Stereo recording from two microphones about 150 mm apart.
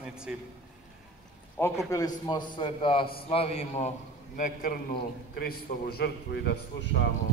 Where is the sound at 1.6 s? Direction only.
15° left (ahead or behind); by 3.9 s 45° left (ahead or behind).